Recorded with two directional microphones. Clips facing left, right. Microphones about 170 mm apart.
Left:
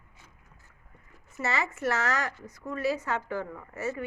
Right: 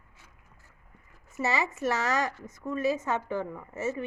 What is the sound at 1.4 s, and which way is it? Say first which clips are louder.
A woman's voice: right 2 dB; 20° right (ahead or behind).